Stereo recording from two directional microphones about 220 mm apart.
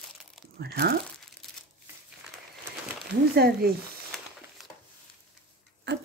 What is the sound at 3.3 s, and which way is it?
Speech, 45° right (ahead or behind).